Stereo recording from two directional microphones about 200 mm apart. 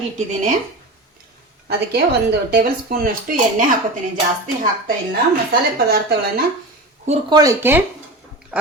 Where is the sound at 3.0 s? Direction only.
45° right (ahead or behind).